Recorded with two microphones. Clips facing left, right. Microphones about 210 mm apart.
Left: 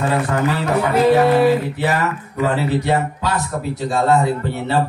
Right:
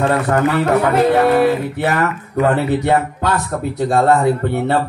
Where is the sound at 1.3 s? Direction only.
55° right (ahead or behind).